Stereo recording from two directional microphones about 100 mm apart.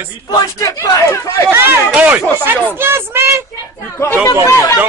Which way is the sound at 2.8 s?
25° right (ahead or behind).